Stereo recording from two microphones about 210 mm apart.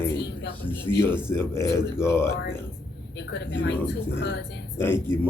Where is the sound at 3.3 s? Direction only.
50° left (ahead or behind).